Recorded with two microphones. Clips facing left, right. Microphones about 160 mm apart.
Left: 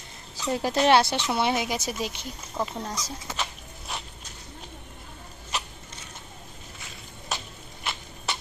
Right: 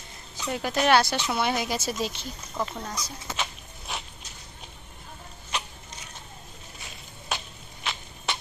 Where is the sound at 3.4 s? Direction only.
Centre (ahead or behind).